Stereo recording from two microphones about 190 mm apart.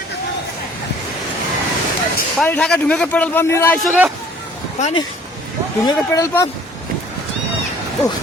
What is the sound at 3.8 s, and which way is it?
Speech, 5° right (ahead or behind).